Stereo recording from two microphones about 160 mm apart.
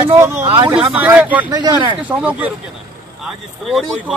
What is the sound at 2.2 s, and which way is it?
Speech, 10° right (ahead or behind).